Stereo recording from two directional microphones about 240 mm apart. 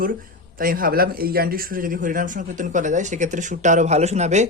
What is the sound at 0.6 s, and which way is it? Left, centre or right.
Speech, right.